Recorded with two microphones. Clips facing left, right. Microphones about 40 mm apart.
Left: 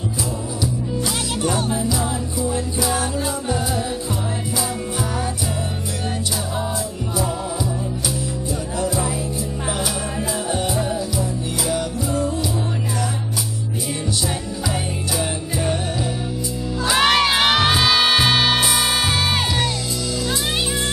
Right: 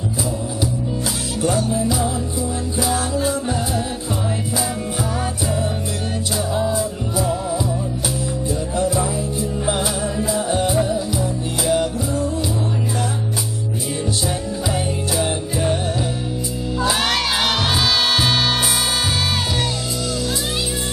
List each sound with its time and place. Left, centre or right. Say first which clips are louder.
1.4 s music: right 3 dB; left
10.2 s music: right 5 dB; left
11.7 s music: right 6 dB; right
14.7 s music: right 2 dB; centre
17.0 s music: left 4 dB; left